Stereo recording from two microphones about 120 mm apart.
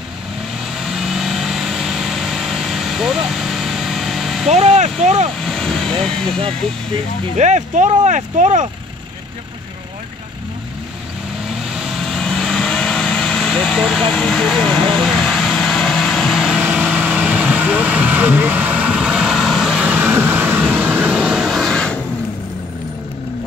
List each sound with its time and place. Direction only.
0.7 s vehicle: centre (ahead or behind)
4.5 s speech: 65° right (ahead or behind)
5.4 s speech: 5° left (ahead or behind)
7.3 s speech: 75° right (ahead or behind)
11.7 s vehicle: centre (ahead or behind)
16.6 s vehicle: 15° right (ahead or behind); by 21.9 s 5° left (ahead or behind)